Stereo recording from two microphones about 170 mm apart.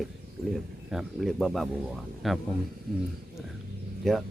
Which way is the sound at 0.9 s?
Centre (ahead or behind).